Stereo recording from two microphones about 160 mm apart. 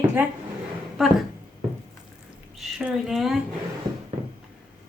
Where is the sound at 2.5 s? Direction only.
Centre (ahead or behind).